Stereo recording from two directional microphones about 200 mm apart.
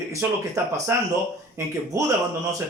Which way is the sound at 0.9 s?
10° right (ahead or behind).